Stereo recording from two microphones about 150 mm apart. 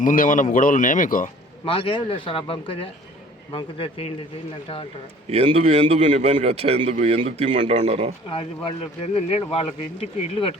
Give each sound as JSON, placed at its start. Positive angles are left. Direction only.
{"t": 0.0, "sound": "speech", "side_deg": 60}
{"t": 1.6, "sound": "speech", "side_deg": 35}
{"t": 5.3, "sound": "a man's voice", "side_deg": -40}
{"t": 8.3, "sound": "speech", "side_deg": 35}